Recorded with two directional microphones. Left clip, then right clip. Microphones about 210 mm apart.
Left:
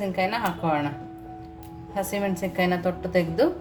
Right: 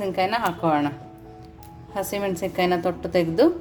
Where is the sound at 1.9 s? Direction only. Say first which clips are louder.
Right 1 dB; 40° right (ahead or behind).